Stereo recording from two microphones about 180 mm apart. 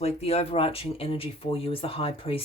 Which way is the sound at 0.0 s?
35° left (ahead or behind).